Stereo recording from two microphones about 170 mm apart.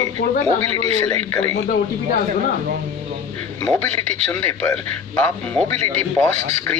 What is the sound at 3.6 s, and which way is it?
A man's voice, 20° left (ahead or behind).